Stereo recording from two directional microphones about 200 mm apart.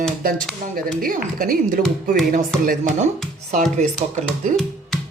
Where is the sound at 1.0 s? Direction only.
45° right (ahead or behind).